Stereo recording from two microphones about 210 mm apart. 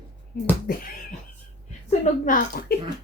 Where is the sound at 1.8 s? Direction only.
35° left (ahead or behind).